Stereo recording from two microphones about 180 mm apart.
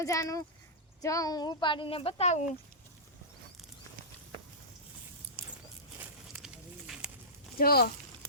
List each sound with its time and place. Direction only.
0.0 s speech: 15° left (ahead or behind); by 2.4 s 35° left (ahead or behind)
5.4 s a sound: 10° right (ahead or behind)
7.6 s speech: 60° left (ahead or behind)